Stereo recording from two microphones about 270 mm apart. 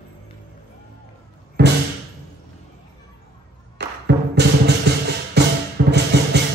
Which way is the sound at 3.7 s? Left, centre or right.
Right.